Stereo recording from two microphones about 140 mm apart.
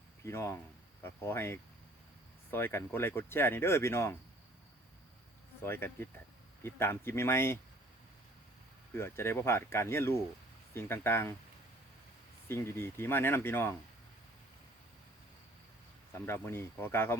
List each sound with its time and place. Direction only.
0.3 s speech: 20° left (ahead or behind)
5.6 s speech: 15° left (ahead or behind)
9.0 s speech: 15° left (ahead or behind)
12.5 s speech: 15° left (ahead or behind)
16.1 s speech: 20° left (ahead or behind)